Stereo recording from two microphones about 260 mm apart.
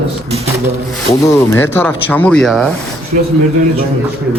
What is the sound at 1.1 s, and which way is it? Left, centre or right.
Speech, centre.